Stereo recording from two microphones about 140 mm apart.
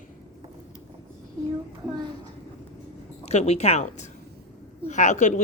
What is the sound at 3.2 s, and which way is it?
Speech, 50° left (ahead or behind).